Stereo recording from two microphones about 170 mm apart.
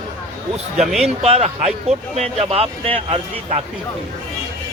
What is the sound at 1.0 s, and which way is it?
Speech, 35° right (ahead or behind).